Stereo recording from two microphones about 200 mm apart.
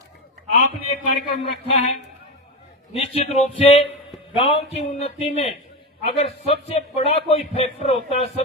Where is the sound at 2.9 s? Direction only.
30° left (ahead or behind).